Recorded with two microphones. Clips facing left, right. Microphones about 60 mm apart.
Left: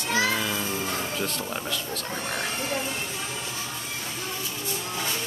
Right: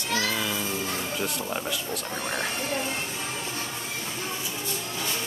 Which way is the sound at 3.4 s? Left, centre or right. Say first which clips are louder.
Right 1 dB; right.